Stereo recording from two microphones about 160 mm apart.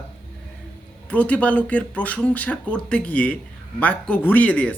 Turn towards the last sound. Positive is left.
turn(degrees=10)  # may be behind; listen again after turning